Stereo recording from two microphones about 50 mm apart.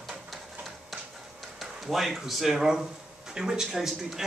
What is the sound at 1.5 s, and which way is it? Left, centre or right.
Speech, centre.